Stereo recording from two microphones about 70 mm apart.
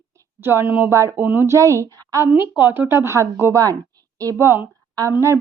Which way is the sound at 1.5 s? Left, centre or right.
Right.